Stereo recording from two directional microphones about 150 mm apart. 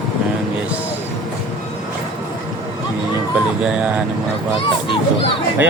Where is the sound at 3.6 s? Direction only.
5° right (ahead or behind).